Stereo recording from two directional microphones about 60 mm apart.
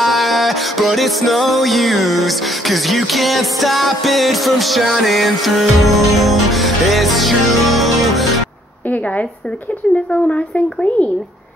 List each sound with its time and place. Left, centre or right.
0.0 s music: centre
9.9 s speech: left